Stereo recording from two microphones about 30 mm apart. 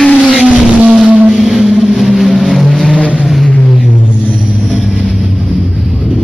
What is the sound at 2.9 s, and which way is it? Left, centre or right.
Vehicle, right.